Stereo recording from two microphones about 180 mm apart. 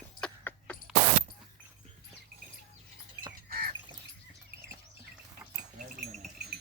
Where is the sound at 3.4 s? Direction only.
55° right (ahead or behind).